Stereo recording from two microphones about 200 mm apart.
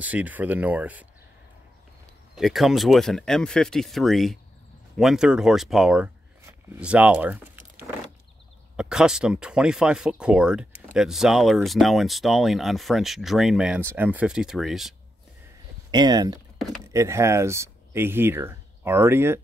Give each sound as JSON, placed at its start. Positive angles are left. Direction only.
{"t": 0.0, "sound": "speech", "side_deg": -5}
{"t": 2.3, "sound": "speech", "side_deg": 0}
{"t": 15.9, "sound": "speech", "side_deg": -20}